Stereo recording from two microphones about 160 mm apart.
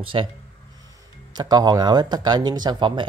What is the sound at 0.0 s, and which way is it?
Speech, 35° right (ahead or behind).